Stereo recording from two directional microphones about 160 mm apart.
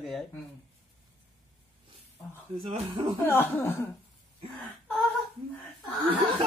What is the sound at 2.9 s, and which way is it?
Speech, 30° right (ahead or behind).